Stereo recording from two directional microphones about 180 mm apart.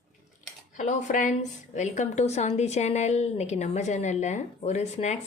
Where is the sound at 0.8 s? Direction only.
45° left (ahead or behind).